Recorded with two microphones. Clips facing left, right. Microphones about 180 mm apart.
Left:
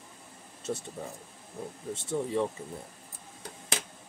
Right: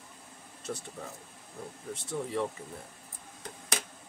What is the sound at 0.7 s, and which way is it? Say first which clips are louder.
Speech: left 4 dB; 20° left (ahead or behind).